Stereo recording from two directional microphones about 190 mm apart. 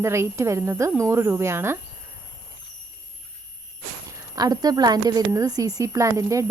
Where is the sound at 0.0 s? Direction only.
15° right (ahead or behind).